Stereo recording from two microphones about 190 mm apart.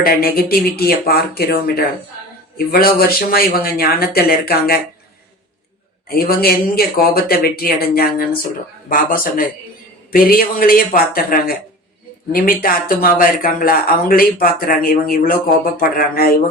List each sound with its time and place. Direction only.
0.0 s speech: 50° left (ahead or behind)
6.1 s speech: 50° left (ahead or behind)